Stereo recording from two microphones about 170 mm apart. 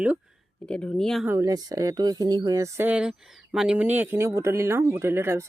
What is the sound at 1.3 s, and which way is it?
Speech, 20° right (ahead or behind).